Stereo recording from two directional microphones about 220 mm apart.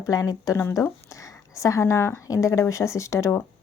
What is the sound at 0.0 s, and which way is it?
Speech, 15° left (ahead or behind).